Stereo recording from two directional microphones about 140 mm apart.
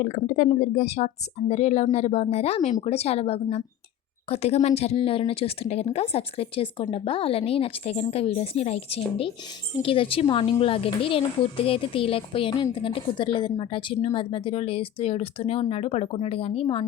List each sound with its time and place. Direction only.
0.0 s speech: 60° left (ahead or behind); by 16.8 s 45° left (ahead or behind)